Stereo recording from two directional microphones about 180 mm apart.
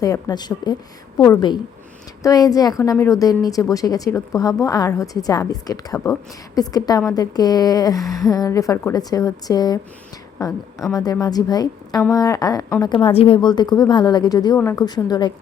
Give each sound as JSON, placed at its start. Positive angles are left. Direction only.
{"t": 0.0, "sound": "a woman's voice", "side_deg": 20}